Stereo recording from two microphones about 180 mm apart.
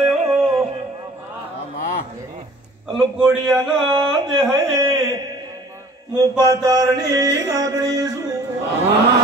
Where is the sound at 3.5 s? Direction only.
25° right (ahead or behind).